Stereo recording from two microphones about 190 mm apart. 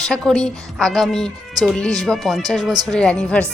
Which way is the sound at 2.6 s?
20° right (ahead or behind).